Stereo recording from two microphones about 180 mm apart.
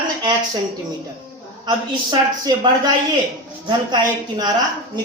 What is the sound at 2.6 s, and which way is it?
A man's voice, 25° right (ahead or behind).